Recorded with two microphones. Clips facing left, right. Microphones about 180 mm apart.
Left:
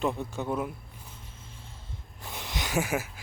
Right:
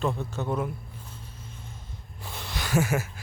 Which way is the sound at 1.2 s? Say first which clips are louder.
Right 4 dB; 25° left (ahead or behind).